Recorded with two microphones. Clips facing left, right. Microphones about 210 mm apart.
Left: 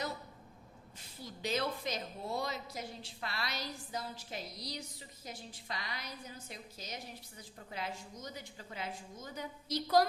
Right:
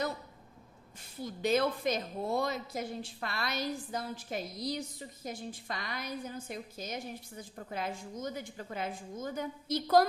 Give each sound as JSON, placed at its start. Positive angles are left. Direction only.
{"t": 1.2, "sound": "a woman's voice", "side_deg": -50}